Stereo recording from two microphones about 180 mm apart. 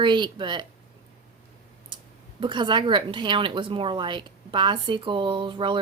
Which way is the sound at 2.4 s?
25° right (ahead or behind).